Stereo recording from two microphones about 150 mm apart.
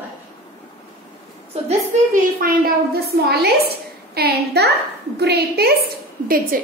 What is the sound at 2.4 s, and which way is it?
A woman's voice, 90° right.